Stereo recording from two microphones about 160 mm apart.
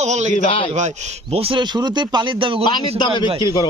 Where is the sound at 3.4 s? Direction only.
25° left (ahead or behind).